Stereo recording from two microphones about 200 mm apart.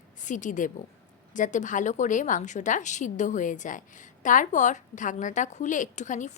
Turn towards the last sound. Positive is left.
turn(degrees=40)  # may be behind; listen again after turning